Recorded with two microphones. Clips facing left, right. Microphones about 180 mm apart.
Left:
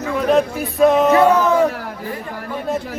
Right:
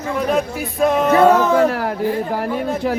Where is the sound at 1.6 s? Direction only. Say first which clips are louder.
Right 2 dB; 85° right.